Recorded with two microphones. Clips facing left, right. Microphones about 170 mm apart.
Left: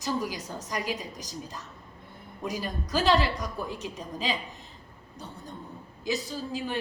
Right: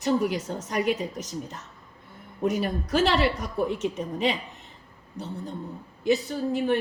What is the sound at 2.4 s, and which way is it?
A woman's voice, 60° right (ahead or behind).